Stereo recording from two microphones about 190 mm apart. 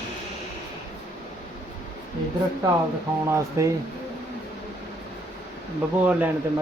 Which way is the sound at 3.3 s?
15° right (ahead or behind).